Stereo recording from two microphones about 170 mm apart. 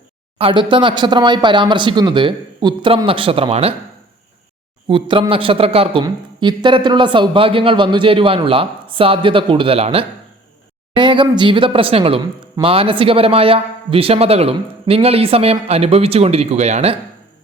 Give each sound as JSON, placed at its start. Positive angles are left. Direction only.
{"t": 0.3, "sound": "speech", "side_deg": -30}
{"t": 4.9, "sound": "a man's voice", "side_deg": -30}